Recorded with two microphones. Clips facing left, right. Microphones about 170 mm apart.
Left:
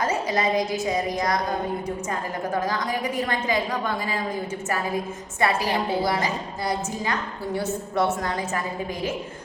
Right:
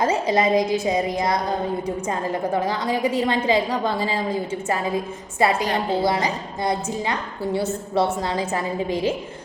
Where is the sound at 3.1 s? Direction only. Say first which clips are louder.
Right 6 dB; 30° right (ahead or behind).